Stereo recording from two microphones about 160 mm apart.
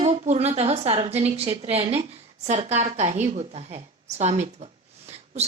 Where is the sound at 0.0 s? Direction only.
45° right (ahead or behind).